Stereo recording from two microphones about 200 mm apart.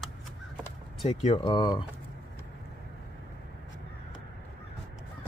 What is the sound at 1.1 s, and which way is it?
Speech, 30° left (ahead or behind).